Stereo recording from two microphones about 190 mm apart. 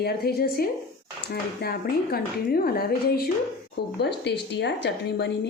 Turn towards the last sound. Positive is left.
turn(degrees=65)  # may be behind; listen again after turning